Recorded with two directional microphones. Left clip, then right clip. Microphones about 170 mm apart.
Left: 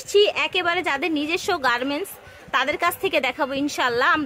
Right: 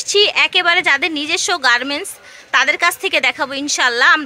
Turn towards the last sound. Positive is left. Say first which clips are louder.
# right 7 dB
turn(degrees=5)  # may be behind; listen again after turning